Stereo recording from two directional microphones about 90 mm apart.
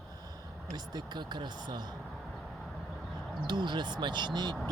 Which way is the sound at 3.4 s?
55° right (ahead or behind).